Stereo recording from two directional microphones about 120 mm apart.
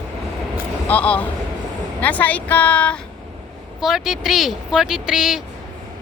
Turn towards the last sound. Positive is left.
turn(degrees=-5)  # may be behind; listen again after turning